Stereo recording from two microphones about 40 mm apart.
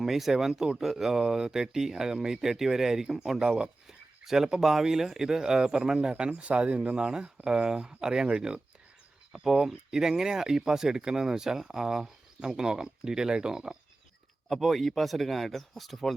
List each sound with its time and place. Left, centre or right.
0.0 s speech: centre
6.3 s speech: right
14.5 s speech: centre